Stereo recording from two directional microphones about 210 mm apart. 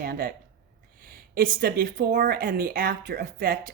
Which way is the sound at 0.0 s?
45° right (ahead or behind).